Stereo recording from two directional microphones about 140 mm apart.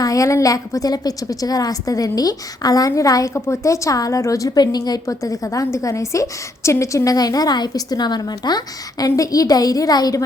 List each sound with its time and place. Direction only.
0.0 s a woman's voice: 25° left (ahead or behind)